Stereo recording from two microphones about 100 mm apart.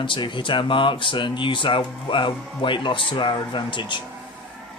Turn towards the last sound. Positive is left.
turn(degrees=55)  # may be behind; listen again after turning